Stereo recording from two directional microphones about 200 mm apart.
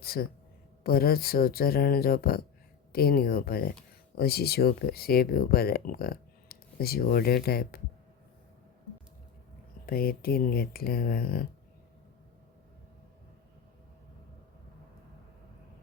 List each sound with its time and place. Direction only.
0.0 s speech: 50° left (ahead or behind)
9.8 s speech: 45° left (ahead or behind)